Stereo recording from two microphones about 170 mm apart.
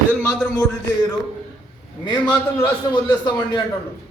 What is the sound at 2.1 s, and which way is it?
A man's voice, 25° left (ahead or behind).